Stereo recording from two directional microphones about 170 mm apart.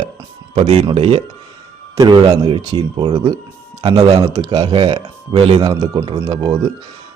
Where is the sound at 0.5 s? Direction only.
40° right (ahead or behind).